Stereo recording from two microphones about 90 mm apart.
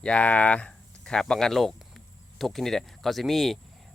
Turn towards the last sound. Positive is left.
turn(degrees=0)  # may be behind; listen again after turning